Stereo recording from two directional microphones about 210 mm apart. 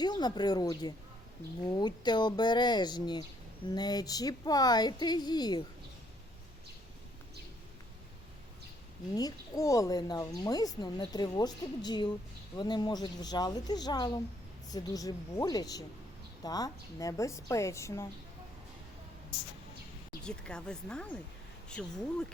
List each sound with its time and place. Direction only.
0.0 s speech: 20° left (ahead or behind)
9.1 s a woman's voice: 15° left (ahead or behind)
20.2 s speech: 5° left (ahead or behind)